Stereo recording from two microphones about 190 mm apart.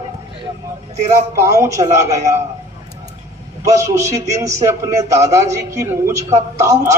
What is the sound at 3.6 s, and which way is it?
A man's voice, 15° right (ahead or behind).